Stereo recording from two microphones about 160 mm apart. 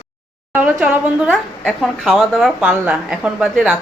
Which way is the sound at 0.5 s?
10° right (ahead or behind).